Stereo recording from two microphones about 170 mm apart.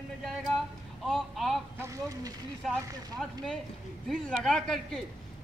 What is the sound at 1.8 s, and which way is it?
Speech, 20° right (ahead or behind).